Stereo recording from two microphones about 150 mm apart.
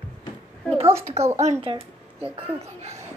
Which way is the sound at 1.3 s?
50° right (ahead or behind).